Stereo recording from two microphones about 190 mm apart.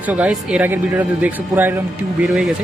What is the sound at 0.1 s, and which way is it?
Speech, 5° right (ahead or behind).